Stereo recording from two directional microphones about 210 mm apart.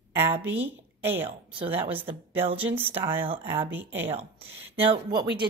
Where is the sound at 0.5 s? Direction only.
10° right (ahead or behind).